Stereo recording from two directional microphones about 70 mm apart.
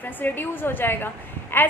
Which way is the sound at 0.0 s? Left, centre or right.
Left.